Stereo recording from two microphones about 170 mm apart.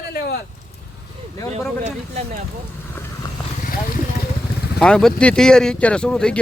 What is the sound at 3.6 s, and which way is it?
Vehicle, 55° left (ahead or behind).